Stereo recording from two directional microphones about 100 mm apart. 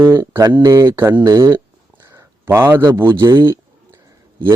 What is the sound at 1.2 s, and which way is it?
Mantra, 35° right (ahead or behind).